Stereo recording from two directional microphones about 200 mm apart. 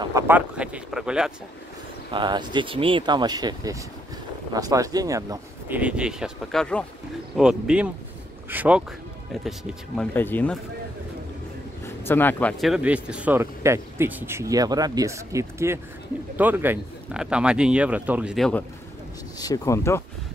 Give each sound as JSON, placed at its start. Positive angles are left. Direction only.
{"t": 0.0, "sound": "speech", "side_deg": -10}
{"t": 2.1, "sound": "speech", "side_deg": -20}
{"t": 10.1, "sound": "speech", "side_deg": 10}
{"t": 11.8, "sound": "speech", "side_deg": 10}
{"t": 19.3, "sound": "speech", "side_deg": 20}